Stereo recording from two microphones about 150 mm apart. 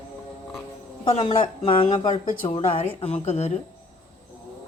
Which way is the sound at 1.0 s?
35° left (ahead or behind).